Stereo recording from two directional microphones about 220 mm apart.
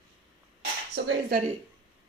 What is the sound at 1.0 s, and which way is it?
Speech, 55° right (ahead or behind).